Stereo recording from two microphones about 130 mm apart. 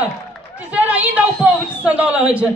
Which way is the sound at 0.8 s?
10° right (ahead or behind).